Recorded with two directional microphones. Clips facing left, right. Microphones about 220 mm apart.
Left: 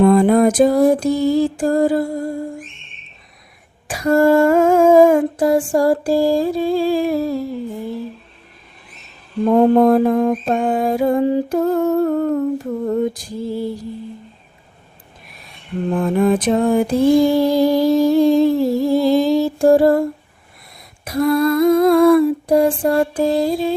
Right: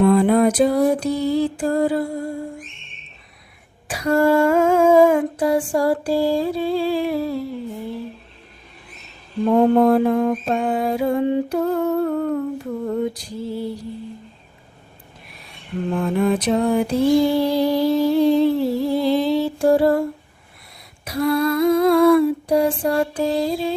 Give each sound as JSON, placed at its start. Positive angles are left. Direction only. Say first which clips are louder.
{"t": 0.0, "sound": "mantra", "louder": "left 3 dB", "side_deg": 45}
{"t": 3.8, "sound": "humming", "louder": "left 3 dB", "side_deg": 45}
{"t": 5.4, "sound": "mantra", "louder": "left 4 dB", "side_deg": 45}
{"t": 9.7, "sound": "mantra", "louder": "left 3 dB", "side_deg": 40}
{"t": 16.0, "sound": "mantra", "louder": "left 4 dB", "side_deg": 50}